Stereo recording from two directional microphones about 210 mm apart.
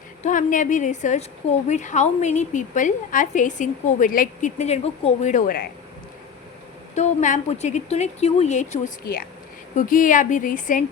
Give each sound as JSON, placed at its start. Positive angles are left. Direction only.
{"t": 0.2, "sound": "a woman's voice", "side_deg": 40}
{"t": 6.9, "sound": "a woman's voice", "side_deg": 35}